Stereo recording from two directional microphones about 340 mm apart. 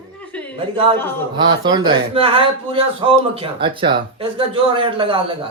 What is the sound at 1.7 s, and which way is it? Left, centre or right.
A man's voice, centre.